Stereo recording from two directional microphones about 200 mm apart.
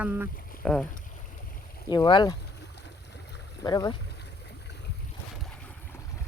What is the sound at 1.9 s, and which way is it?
Speech, 20° left (ahead or behind).